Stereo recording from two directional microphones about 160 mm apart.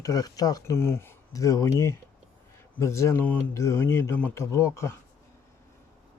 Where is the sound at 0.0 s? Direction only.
25° left (ahead or behind).